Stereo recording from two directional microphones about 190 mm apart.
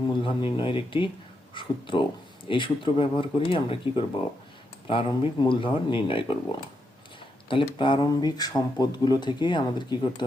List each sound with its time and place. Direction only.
0.2 s speech: 25° left (ahead or behind)
7.4 s speech: 25° left (ahead or behind)